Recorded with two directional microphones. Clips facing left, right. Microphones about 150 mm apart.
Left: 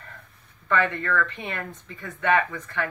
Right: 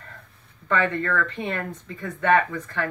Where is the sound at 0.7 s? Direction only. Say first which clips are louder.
Right 1 dB; 35° right (ahead or behind).